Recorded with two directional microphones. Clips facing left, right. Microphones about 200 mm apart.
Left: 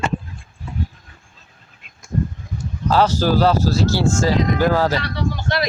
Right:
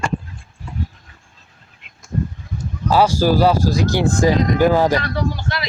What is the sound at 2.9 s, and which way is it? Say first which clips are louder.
Speech: right 2 dB; 10° right (ahead or behind).